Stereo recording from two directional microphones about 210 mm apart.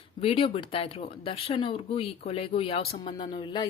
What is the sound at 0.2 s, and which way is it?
Speech, 25° left (ahead or behind).